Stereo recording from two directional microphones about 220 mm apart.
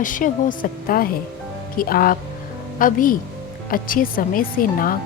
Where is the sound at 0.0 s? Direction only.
35° left (ahead or behind).